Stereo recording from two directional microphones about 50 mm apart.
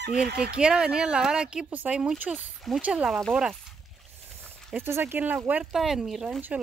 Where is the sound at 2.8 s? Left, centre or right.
Right.